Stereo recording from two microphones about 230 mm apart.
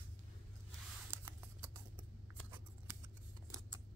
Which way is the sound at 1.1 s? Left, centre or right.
Centre.